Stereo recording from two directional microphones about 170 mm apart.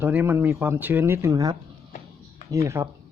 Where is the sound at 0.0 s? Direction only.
10° right (ahead or behind).